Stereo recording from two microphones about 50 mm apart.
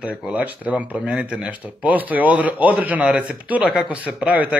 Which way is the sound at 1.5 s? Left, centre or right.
Right.